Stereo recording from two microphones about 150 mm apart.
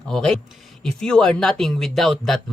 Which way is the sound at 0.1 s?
5° left (ahead or behind).